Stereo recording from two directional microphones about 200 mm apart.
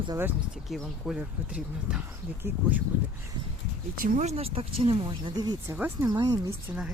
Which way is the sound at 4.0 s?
35° right (ahead or behind).